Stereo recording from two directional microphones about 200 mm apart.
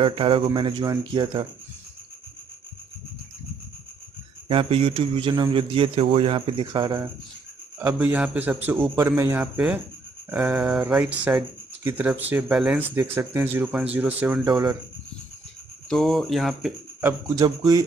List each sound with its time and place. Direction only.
0.0 s a man's voice: 25° right (ahead or behind)
4.5 s a man's voice: 30° right (ahead or behind)
7.8 s speech: 10° right (ahead or behind)
15.9 s speech: centre (ahead or behind)
17.4 s a man's voice: 20° right (ahead or behind)